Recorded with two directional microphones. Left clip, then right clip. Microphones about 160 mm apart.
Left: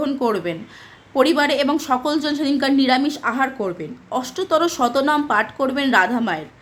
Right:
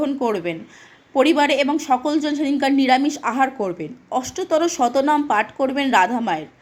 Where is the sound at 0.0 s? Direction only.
10° right (ahead or behind).